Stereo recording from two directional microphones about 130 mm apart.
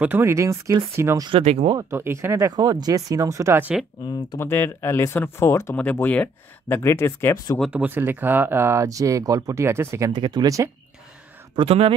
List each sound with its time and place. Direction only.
0.0 s speech: 15° right (ahead or behind)
1.4 s speech: 55° right (ahead or behind)
1.8 s speech: 20° right (ahead or behind)
4.4 s speech: 20° left (ahead or behind)
7.7 s speech: 15° right (ahead or behind)
11.5 s speech: 50° right (ahead or behind)